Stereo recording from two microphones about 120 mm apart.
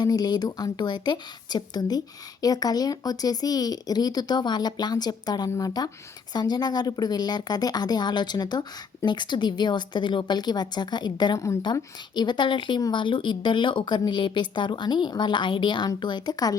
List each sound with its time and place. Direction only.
0.0 s speech: 35° left (ahead or behind)